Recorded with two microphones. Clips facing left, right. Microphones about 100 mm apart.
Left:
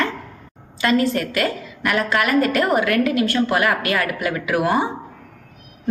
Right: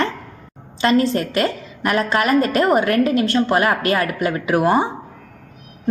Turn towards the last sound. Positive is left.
turn(degrees=-30)  # may be behind; listen again after turning